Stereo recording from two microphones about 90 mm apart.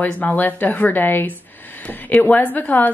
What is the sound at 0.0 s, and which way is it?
A woman's voice, 20° left (ahead or behind).